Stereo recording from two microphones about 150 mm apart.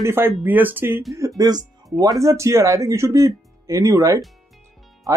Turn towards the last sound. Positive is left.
turn(degrees=-20)  # may be behind; listen again after turning